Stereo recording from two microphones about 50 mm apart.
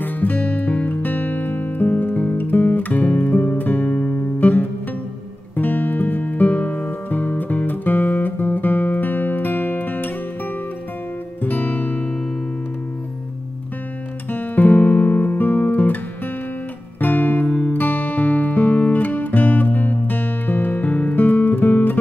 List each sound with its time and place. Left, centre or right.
0.0 s music: left
11.4 s music: left
14.3 s music: left
17.0 s music: left
17.5 s music: centre
17.7 s music: left